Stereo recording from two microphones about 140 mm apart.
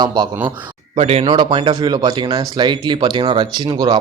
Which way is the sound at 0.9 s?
45° right (ahead or behind).